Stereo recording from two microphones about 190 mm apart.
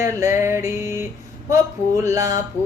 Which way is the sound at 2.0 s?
15° right (ahead or behind).